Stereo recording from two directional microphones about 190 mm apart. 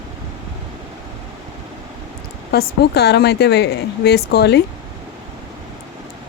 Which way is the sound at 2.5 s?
55° left (ahead or behind).